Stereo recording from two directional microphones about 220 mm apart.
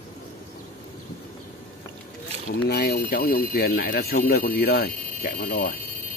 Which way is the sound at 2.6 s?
45° left (ahead or behind).